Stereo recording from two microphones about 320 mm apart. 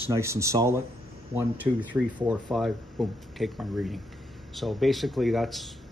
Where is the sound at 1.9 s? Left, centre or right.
Centre.